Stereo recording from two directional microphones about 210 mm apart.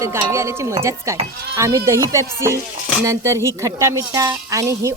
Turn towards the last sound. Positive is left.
turn(degrees=-15)  # may be behind; listen again after turning